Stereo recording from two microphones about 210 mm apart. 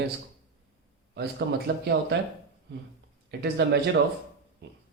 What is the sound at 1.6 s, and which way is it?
Speech, 50° right (ahead or behind).